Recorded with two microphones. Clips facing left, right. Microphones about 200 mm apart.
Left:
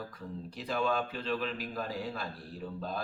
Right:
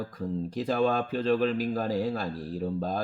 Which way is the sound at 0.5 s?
45° right (ahead or behind).